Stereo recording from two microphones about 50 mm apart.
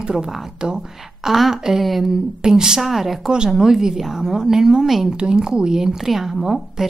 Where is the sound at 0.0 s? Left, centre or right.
Centre.